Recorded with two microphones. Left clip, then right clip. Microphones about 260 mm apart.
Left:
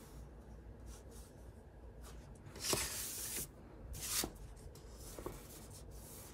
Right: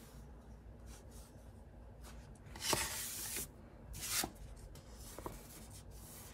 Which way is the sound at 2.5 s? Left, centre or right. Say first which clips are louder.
Right 2 dB; centre.